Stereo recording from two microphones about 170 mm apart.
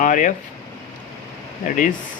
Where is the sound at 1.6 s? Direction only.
50° left (ahead or behind).